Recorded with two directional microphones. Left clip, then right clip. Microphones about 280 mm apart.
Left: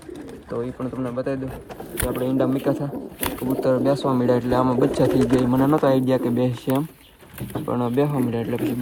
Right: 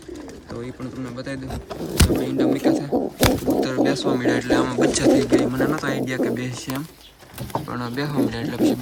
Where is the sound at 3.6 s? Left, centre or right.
Centre.